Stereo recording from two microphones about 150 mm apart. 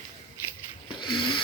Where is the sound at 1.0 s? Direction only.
30° left (ahead or behind).